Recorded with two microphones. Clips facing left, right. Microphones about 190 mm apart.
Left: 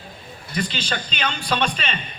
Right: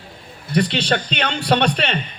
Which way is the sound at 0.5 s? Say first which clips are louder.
Right 8 dB; 65° right (ahead or behind).